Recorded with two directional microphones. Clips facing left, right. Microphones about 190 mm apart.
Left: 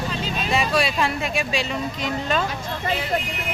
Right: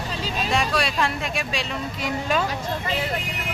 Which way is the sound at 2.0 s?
10° right (ahead or behind).